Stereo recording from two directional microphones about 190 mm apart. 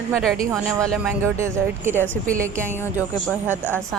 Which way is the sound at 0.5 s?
15° right (ahead or behind).